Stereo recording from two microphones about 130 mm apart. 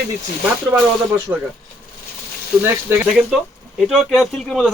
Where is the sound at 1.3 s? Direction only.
15° right (ahead or behind).